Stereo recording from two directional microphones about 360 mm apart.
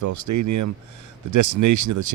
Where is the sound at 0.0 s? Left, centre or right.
Right.